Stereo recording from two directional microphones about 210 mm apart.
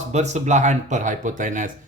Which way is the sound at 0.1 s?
35° right (ahead or behind).